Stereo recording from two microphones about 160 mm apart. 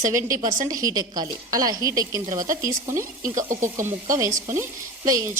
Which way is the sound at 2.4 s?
55° right (ahead or behind).